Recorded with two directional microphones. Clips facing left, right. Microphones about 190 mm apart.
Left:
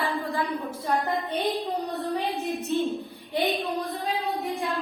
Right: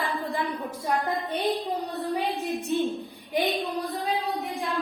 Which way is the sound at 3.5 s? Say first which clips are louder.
Even; centre (ahead or behind).